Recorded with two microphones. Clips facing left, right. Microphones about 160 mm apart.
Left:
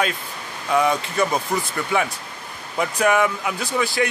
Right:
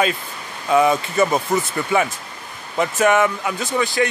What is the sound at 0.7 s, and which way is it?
Speech, 5° right (ahead or behind).